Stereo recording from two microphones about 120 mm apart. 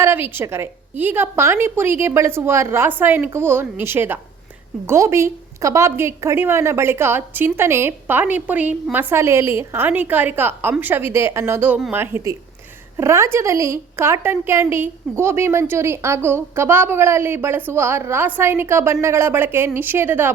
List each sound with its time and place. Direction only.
0.0 s a woman's voice: 20° right (ahead or behind)